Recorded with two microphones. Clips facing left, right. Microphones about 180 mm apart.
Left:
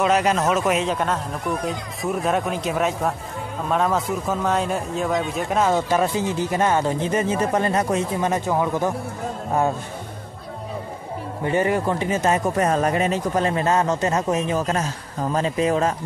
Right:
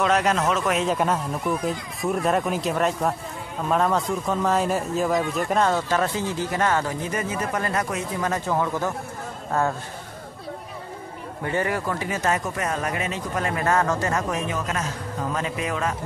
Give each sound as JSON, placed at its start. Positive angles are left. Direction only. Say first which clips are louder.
{"t": 0.0, "sound": "a man's voice", "louder": "left 2 dB", "side_deg": 10}
{"t": 0.8, "sound": "speech", "louder": "right 1 dB", "side_deg": -5}
{"t": 5.7, "sound": "speech", "louder": "left 3 dB", "side_deg": 15}
{"t": 11.4, "sound": "speech", "louder": "left 5 dB", "side_deg": 20}
{"t": 12.5, "sound": "speech", "louder": "left 7 dB", "side_deg": 35}
{"t": 14.5, "sound": "speech", "louder": "left 5 dB", "side_deg": 35}